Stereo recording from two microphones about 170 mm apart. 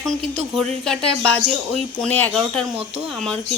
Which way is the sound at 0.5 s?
5° left (ahead or behind).